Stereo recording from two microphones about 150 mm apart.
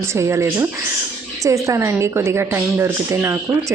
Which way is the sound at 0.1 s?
20° right (ahead or behind).